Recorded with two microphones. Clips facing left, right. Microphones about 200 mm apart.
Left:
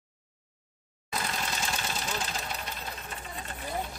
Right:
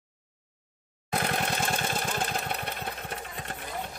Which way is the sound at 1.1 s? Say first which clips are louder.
Right 5 dB; 60° right (ahead or behind).